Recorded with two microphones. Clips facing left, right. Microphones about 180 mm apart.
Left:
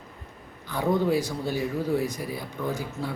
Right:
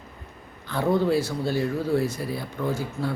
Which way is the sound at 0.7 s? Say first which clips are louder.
Right 2 dB; 15° left (ahead or behind).